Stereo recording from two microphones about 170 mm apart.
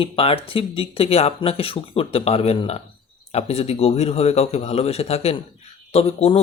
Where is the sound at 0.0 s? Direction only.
30° left (ahead or behind).